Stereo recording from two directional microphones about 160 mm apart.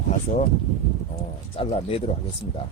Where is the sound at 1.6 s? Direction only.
40° left (ahead or behind).